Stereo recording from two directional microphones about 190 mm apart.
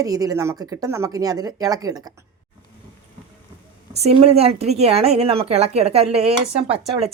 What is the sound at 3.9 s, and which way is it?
Speech, 35° right (ahead or behind).